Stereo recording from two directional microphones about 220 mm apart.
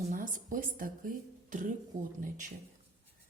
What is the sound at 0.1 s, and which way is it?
A woman's voice, 35° right (ahead or behind).